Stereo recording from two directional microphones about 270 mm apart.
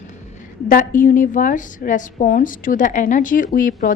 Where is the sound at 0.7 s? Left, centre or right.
Left.